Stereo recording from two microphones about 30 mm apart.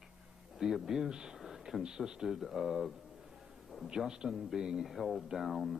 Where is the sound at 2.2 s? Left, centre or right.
Centre.